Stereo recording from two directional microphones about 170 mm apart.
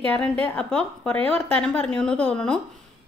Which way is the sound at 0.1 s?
10° left (ahead or behind).